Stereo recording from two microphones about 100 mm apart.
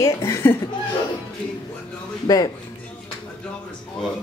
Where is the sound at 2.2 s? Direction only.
40° left (ahead or behind).